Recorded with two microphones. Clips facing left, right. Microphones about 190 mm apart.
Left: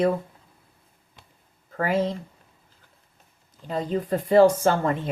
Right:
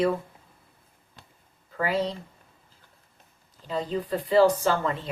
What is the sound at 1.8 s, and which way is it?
Speech, 45° left (ahead or behind).